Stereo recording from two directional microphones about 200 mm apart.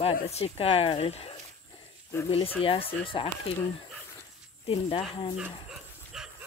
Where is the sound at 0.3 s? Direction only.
30° left (ahead or behind).